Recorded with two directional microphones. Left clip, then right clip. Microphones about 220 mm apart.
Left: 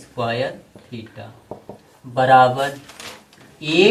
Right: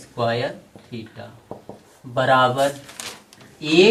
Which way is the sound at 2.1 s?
20° right (ahead or behind).